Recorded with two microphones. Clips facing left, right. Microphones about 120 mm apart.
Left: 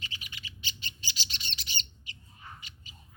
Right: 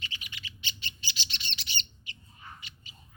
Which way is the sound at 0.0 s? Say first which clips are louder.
Right 1 dB; 40° left (ahead or behind).